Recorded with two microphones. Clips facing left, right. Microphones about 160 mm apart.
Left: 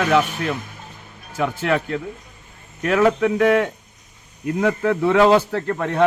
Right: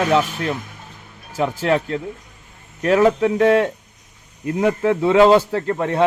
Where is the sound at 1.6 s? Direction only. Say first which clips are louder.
Right 3 dB; 30° right (ahead or behind).